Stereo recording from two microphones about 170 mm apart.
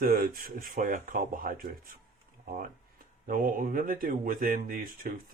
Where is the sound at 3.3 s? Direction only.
55° right (ahead or behind).